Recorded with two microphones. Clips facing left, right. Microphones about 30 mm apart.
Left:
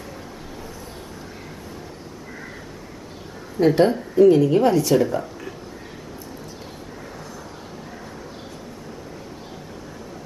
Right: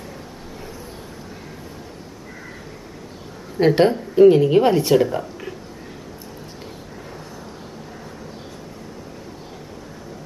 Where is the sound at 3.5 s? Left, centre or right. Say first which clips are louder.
Right 1 dB; right.